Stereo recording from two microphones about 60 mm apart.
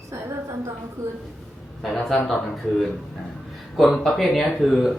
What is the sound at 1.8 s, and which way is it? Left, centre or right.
Speech, centre.